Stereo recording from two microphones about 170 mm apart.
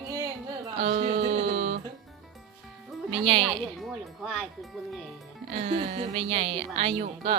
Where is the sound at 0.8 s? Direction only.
35° right (ahead or behind).